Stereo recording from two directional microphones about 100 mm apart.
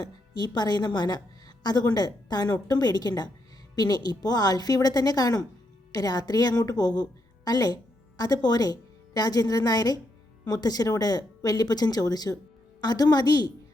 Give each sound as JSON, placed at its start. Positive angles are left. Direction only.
{"t": 0.0, "sound": "a woman's voice", "side_deg": 45}